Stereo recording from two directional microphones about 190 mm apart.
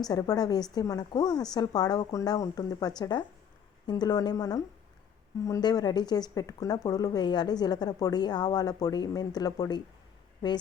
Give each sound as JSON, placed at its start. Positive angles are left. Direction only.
{"t": 0.0, "sound": "speech", "side_deg": 20}